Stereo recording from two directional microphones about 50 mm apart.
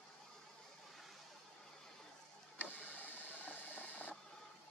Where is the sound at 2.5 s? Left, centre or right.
Left.